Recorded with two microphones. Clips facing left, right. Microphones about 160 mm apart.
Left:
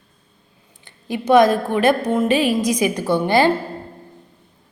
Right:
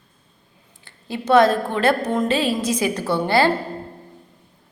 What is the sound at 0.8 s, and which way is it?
A woman's voice, 15° left (ahead or behind).